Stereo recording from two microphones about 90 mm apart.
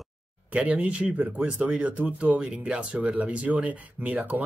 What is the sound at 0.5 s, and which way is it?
Speech, 15° right (ahead or behind).